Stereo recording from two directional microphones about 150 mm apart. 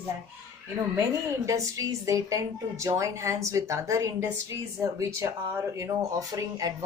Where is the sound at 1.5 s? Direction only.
20° right (ahead or behind).